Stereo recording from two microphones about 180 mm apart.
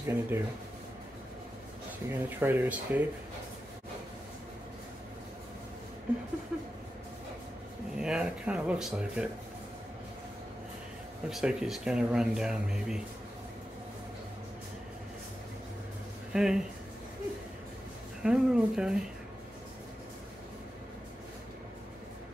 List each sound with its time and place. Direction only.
0.0 s speech: 15° right (ahead or behind)
2.0 s speech: 10° right (ahead or behind)
8.0 s speech: 5° right (ahead or behind)
11.2 s speech: 5° right (ahead or behind)
16.3 s speech: 5° right (ahead or behind)
18.2 s speech: 5° right (ahead or behind)